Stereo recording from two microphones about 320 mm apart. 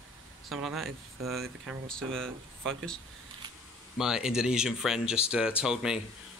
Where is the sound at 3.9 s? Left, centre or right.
Centre.